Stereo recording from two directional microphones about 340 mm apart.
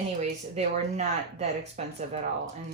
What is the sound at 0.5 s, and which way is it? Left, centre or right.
Speech, centre.